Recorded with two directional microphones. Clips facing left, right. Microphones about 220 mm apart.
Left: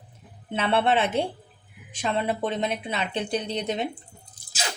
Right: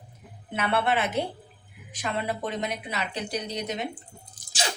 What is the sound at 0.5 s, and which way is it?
Speech, 25° left (ahead or behind).